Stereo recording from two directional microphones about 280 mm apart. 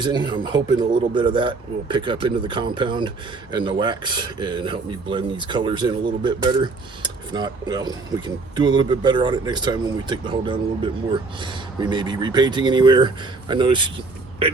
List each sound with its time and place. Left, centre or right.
0.0 s speech: centre